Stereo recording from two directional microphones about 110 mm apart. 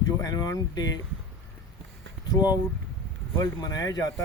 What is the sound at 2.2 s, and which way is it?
Speech, 40° left (ahead or behind).